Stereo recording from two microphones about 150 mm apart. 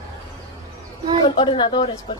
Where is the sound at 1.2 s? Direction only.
30° left (ahead or behind).